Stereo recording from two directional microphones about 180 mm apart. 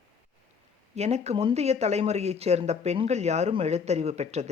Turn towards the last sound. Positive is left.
turn(degrees=-35)  # may be behind; listen again after turning